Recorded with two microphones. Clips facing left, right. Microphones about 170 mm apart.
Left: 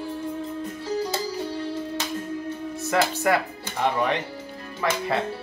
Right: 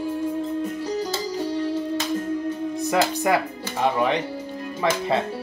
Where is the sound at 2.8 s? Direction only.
15° right (ahead or behind).